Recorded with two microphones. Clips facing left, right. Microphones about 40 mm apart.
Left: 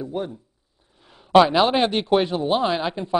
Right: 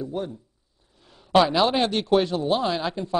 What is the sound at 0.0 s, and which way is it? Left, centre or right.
Speech, centre.